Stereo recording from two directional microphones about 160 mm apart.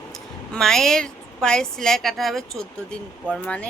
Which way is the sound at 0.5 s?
5° left (ahead or behind).